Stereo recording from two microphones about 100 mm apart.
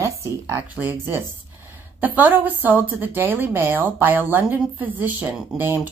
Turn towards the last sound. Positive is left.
turn(degrees=-20)  # may be behind; listen again after turning